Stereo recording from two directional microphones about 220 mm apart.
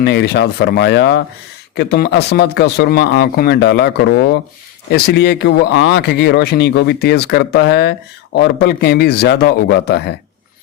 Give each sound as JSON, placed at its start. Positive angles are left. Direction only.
{"t": 0.0, "sound": "speech", "side_deg": 45}